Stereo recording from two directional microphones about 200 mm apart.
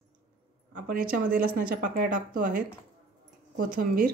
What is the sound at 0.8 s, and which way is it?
Speech, 45° right (ahead or behind).